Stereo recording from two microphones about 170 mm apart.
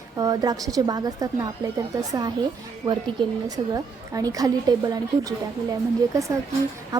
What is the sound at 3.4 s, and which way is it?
A woman's voice, 20° right (ahead or behind).